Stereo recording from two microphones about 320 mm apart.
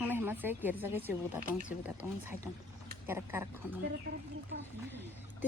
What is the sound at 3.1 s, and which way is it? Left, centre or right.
Speech, centre.